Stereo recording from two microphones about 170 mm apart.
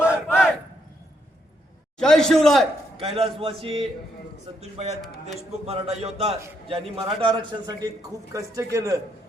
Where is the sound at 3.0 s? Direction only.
35° right (ahead or behind).